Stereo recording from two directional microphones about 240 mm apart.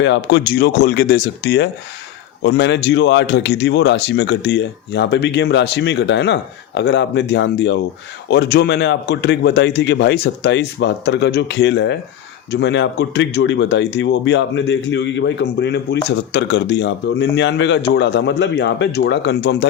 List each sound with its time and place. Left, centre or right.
0.0 s a man's voice: left